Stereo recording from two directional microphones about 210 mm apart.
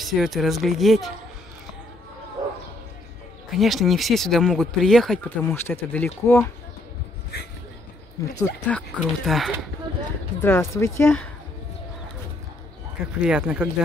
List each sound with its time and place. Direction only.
0.0 s speech: centre (ahead or behind)
2.4 s bow-wow: 15° right (ahead or behind)
3.5 s speech: centre (ahead or behind)
8.2 s speech: 15° left (ahead or behind)
8.6 s speech: 5° left (ahead or behind)
10.4 s speech: 10° left (ahead or behind)
13.2 s speech: 5° right (ahead or behind)